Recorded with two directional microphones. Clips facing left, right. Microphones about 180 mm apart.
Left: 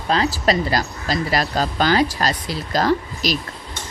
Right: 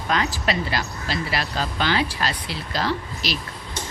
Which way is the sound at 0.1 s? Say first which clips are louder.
Left 5 dB; 35° left (ahead or behind).